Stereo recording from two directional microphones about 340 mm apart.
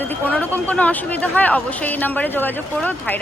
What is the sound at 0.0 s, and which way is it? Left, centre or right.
Speech, centre.